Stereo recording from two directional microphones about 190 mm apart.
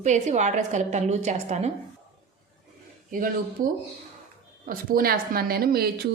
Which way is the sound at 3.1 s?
45° right (ahead or behind).